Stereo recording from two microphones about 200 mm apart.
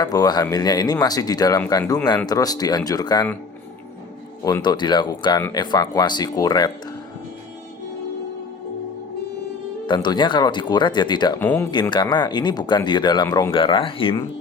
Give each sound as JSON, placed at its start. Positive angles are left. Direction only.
{"t": 0.0, "sound": "speech", "side_deg": 20}
{"t": 4.4, "sound": "speech", "side_deg": 20}
{"t": 9.8, "sound": "speech", "side_deg": 25}
{"t": 11.3, "sound": "speech", "side_deg": 10}
{"t": 11.7, "sound": "speech", "side_deg": 20}